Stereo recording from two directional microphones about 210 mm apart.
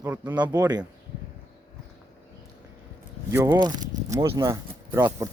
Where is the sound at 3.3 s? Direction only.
10° right (ahead or behind).